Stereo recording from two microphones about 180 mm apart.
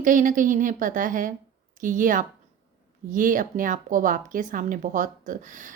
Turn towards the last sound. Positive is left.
turn(degrees=-45)  # may be behind; listen again after turning